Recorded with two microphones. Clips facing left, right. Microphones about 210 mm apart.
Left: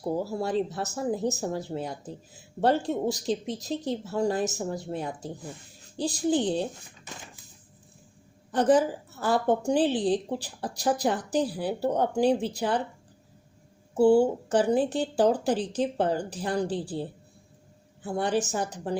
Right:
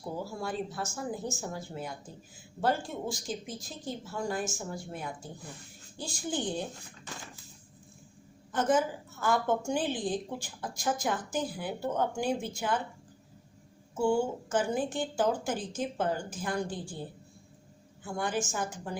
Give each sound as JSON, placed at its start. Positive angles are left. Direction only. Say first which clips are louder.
{"t": 0.0, "sound": "speech", "louder": "left 7 dB", "side_deg": 35}
{"t": 8.5, "sound": "speech", "louder": "left 6 dB", "side_deg": 35}
{"t": 13.9, "sound": "speech", "louder": "left 8 dB", "side_deg": 35}
{"t": 18.0, "sound": "speech", "louder": "left 6 dB", "side_deg": 35}